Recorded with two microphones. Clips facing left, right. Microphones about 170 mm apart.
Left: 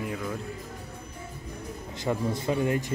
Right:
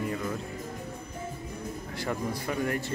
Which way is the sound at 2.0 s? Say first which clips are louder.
Left 5 dB; 20° left (ahead or behind).